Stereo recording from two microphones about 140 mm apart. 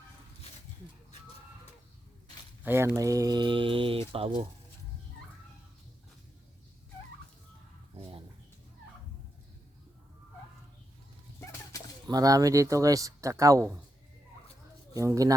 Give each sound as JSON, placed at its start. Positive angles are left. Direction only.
{"t": 2.6, "sound": "speech", "side_deg": -20}
{"t": 7.9, "sound": "a sound", "side_deg": -40}
{"t": 12.0, "sound": "speech", "side_deg": -25}
{"t": 14.9, "sound": "speech", "side_deg": -25}